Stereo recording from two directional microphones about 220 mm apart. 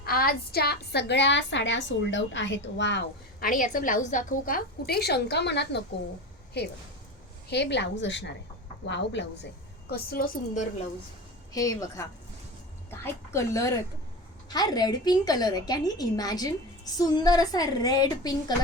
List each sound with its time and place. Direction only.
0.0 s a woman's voice: 40° left (ahead or behind)
11.5 s a woman's voice: 15° left (ahead or behind)